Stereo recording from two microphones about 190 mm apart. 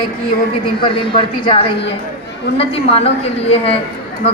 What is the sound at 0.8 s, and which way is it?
A woman's voice, 25° left (ahead or behind).